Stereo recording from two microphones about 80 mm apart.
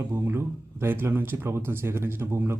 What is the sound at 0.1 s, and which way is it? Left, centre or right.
Speech, right.